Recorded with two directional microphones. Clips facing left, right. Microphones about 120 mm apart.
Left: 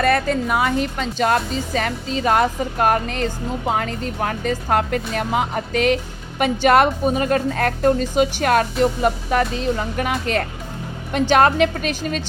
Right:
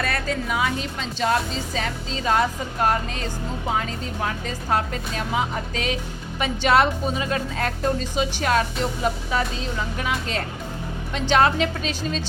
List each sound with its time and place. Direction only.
0.0 s a woman's voice: 55° left (ahead or behind)